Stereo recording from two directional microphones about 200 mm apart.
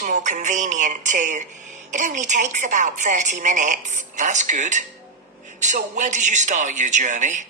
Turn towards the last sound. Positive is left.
turn(degrees=-40)  # may be behind; listen again after turning